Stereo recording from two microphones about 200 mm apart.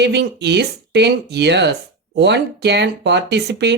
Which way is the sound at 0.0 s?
55° right (ahead or behind).